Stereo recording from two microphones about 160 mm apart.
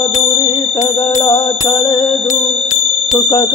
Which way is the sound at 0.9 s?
35° left (ahead or behind).